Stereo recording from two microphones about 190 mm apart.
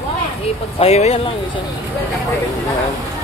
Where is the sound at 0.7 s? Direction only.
35° left (ahead or behind).